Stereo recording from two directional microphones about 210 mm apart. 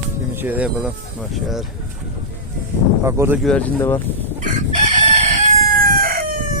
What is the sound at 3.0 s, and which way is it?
Speech, 10° right (ahead or behind).